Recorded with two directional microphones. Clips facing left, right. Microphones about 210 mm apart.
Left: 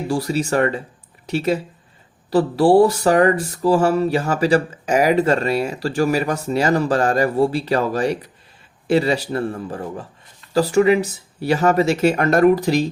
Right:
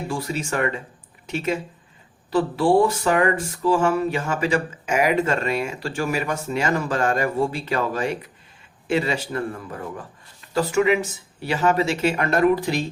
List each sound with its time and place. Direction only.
0.1 s speech: 35° left (ahead or behind)